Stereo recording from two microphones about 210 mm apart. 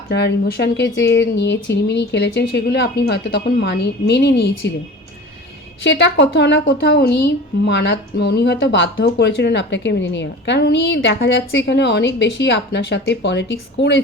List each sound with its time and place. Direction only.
0.1 s a woman's voice: 55° left (ahead or behind)
5.8 s a woman's voice: 60° left (ahead or behind)